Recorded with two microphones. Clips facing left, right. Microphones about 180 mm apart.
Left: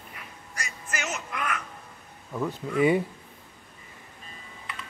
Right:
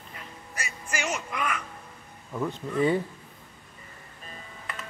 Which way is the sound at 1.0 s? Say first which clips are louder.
Right 3 dB; centre (ahead or behind).